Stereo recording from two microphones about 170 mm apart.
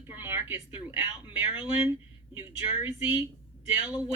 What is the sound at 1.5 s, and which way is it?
Speech, 35° left (ahead or behind).